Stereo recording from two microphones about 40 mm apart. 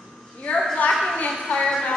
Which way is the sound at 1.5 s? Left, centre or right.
Centre.